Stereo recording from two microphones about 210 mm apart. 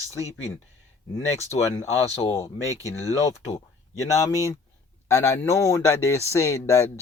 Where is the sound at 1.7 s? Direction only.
15° left (ahead or behind).